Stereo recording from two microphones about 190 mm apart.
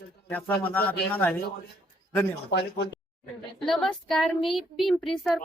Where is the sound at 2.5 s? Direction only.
60° left (ahead or behind).